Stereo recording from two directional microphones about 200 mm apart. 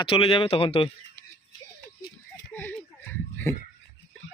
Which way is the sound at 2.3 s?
10° left (ahead or behind).